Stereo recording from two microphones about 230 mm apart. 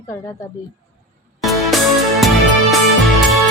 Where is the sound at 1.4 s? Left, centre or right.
Centre.